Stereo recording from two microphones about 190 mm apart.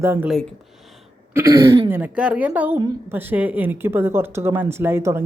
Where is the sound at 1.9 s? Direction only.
5° right (ahead or behind).